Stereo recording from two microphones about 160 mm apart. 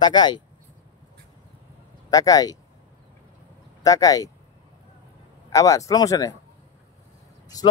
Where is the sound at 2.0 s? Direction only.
25° left (ahead or behind).